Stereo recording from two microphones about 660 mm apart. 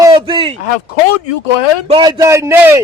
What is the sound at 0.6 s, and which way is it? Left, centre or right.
Speech, left.